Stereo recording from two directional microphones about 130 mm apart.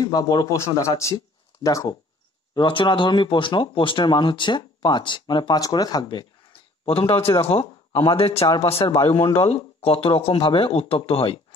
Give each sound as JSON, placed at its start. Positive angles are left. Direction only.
{"t": 0.0, "sound": "a man's voice", "side_deg": 30}
{"t": 2.5, "sound": "speech", "side_deg": 40}
{"t": 6.9, "sound": "speech", "side_deg": 45}